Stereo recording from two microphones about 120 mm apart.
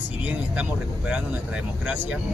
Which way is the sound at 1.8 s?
10° right (ahead or behind).